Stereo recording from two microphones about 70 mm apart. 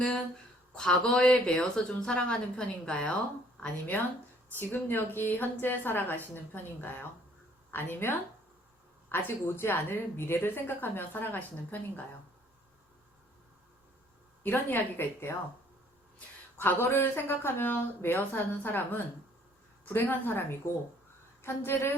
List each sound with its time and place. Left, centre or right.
0.8 s a woman's voice: centre
14.4 s a woman's voice: left
16.6 s a woman's voice: left
21.4 s a woman's voice: left